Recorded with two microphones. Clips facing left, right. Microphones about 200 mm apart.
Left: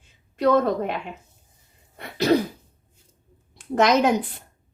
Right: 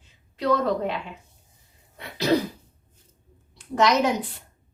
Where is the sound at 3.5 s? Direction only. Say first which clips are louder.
Left 2 dB; 55° left (ahead or behind).